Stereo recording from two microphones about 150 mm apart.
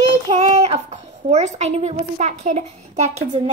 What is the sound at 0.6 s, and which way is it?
A child's voice, 45° right (ahead or behind).